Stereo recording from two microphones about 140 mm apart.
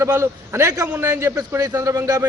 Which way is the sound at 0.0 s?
20° right (ahead or behind).